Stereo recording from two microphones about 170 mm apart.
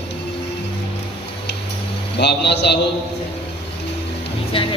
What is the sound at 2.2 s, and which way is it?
Speech, 80° left.